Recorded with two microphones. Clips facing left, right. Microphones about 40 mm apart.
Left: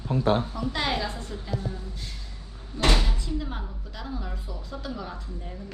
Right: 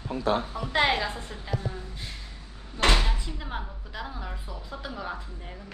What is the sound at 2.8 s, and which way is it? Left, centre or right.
Speech, right.